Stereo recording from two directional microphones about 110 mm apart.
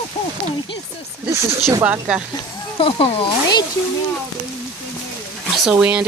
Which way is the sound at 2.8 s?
60° left (ahead or behind).